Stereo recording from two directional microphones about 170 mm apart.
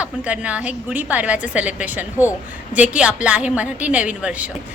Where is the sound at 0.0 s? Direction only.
10° right (ahead or behind).